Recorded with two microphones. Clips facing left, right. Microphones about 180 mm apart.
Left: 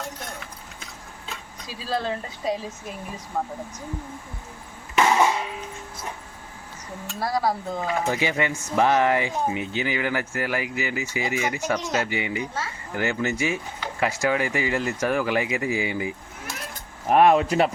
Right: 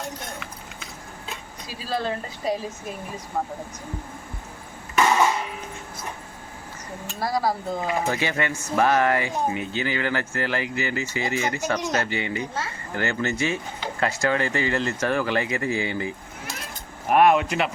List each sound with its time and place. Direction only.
1.6 s speech: centre (ahead or behind)
4.9 s a sound: 10° left (ahead or behind)
7.2 s speech: centre (ahead or behind)
8.1 s speech: 15° left (ahead or behind)
17.1 s speech: 30° left (ahead or behind)